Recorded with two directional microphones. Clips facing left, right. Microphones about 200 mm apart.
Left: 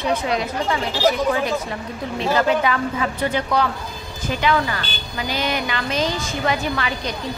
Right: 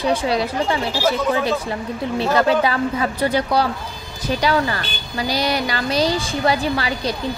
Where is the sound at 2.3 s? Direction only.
35° right (ahead or behind).